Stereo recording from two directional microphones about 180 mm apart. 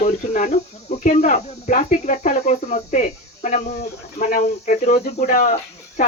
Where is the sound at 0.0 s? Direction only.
40° left (ahead or behind).